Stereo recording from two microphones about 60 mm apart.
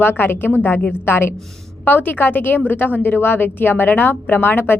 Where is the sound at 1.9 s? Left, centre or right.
Left.